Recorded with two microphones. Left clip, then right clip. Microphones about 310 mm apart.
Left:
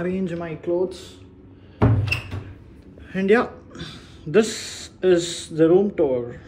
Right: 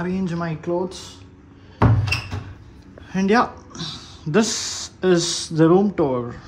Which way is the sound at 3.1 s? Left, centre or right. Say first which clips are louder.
Even; centre.